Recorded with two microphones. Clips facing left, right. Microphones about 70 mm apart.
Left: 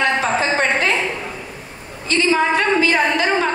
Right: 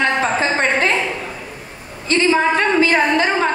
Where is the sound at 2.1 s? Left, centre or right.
Right.